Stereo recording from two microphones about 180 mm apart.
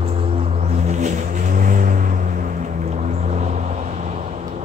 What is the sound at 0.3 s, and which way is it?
Vehicle, 35° right (ahead or behind).